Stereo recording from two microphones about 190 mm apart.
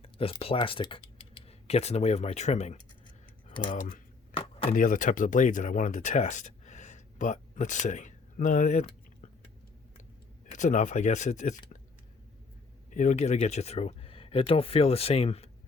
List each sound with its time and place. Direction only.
0.0 s speech: 30° left (ahead or behind)
3.5 s speech: 25° left (ahead or behind)
3.8 s cutlery: 45° left (ahead or behind)
4.7 s speech: 45° left (ahead or behind)
10.5 s speech: 40° left (ahead or behind)
12.9 s speech: 40° left (ahead or behind)